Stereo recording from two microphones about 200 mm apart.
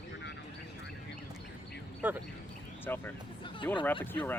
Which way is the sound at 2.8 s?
10° left (ahead or behind).